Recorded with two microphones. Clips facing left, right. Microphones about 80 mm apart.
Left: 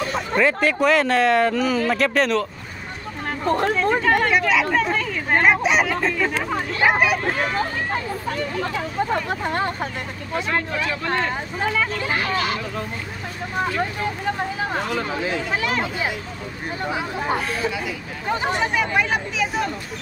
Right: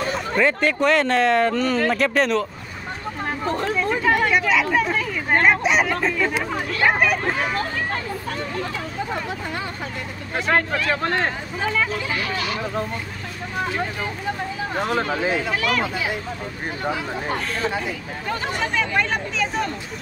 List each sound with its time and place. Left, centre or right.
0.4 s speech: centre
3.4 s speech: left
4.0 s speech: centre
6.5 s speech: centre
6.9 s speech: centre
9.1 s speech: left
10.3 s speech: right
11.6 s speech: centre
12.1 s speech: left
15.5 s speech: left
17.6 s speech: right
18.6 s speech: centre